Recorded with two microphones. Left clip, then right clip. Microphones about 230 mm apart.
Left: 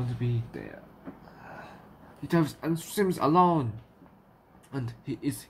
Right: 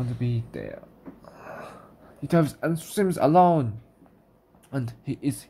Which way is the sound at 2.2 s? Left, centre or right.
Right.